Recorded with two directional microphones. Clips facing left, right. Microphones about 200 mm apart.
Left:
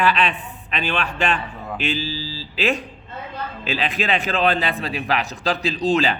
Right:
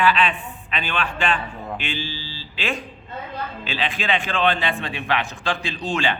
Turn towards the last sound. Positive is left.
turn(degrees=35)  # may be behind; listen again after turning